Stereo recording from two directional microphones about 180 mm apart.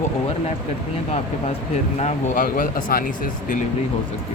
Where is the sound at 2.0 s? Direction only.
45° left (ahead or behind).